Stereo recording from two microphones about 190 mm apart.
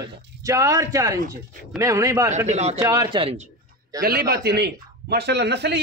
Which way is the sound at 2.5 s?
35° right (ahead or behind).